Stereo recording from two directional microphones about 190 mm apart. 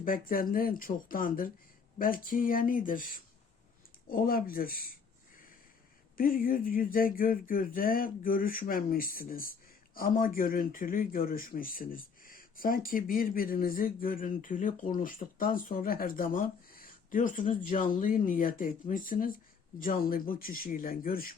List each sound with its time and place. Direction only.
0.0 s speech: 50° left (ahead or behind)
6.1 s speech: 50° left (ahead or behind)